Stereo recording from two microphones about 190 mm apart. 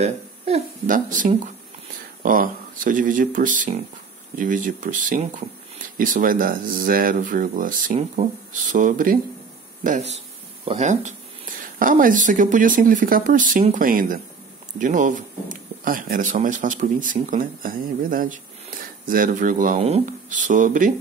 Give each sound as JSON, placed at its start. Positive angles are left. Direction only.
{"t": 0.0, "sound": "speech", "side_deg": -40}